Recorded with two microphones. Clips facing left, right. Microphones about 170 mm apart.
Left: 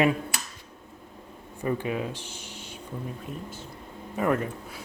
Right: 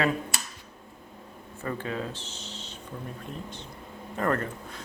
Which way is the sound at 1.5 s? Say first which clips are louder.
Left 4 dB; 15° left (ahead or behind).